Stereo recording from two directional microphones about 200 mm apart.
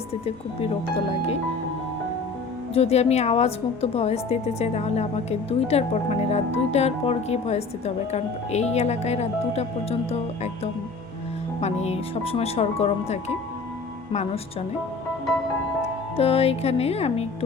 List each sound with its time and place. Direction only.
0.1 s speech: 30° left (ahead or behind)
2.7 s a woman's voice: 30° left (ahead or behind)
16.1 s a woman's voice: 30° left (ahead or behind)